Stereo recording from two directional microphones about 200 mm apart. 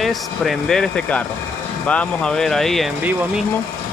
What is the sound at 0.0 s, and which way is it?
Speech, centre (ahead or behind).